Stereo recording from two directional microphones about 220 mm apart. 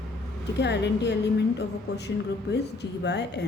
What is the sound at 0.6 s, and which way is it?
Speech, 50° left (ahead or behind).